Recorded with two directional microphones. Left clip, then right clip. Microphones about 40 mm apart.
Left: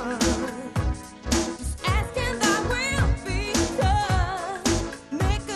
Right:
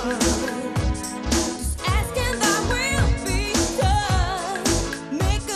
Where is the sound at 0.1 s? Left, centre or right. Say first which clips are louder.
Right 2 dB; left.